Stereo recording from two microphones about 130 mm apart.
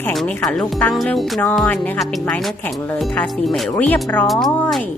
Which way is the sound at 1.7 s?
15° left (ahead or behind).